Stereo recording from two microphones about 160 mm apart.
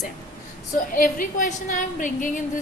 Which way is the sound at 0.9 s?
60° left (ahead or behind).